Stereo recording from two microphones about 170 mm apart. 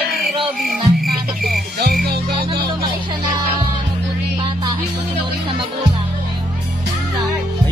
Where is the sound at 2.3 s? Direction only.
25° right (ahead or behind).